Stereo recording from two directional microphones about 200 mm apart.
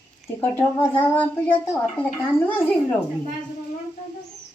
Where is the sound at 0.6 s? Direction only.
10° left (ahead or behind).